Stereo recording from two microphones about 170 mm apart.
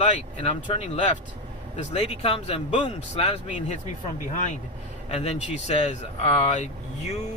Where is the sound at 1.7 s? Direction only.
40° left (ahead or behind).